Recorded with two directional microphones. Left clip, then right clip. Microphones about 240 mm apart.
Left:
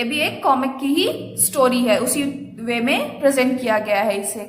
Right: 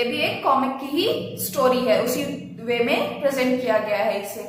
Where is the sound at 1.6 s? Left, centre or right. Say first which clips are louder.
Left 2 dB; left.